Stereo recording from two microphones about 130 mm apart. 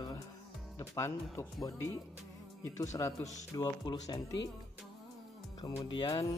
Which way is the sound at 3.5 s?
30° left (ahead or behind).